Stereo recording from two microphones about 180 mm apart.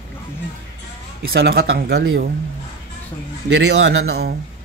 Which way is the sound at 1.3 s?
75° right (ahead or behind).